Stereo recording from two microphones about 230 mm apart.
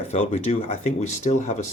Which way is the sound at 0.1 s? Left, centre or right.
Left.